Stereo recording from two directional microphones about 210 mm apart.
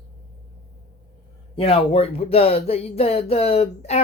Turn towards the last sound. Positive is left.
turn(degrees=30)  # may be behind; listen again after turning